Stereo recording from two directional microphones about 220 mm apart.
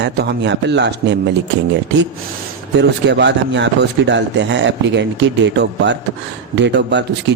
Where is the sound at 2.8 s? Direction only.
50° right (ahead or behind).